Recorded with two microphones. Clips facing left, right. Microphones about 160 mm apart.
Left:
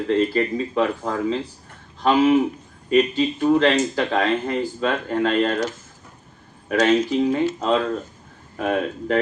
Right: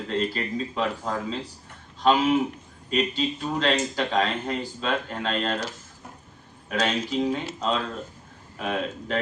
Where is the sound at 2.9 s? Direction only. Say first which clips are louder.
Left 7 dB; 55° left (ahead or behind).